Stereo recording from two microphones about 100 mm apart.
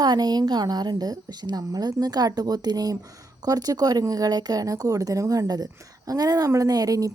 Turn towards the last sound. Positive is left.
turn(degrees=-35)  # may be behind; listen again after turning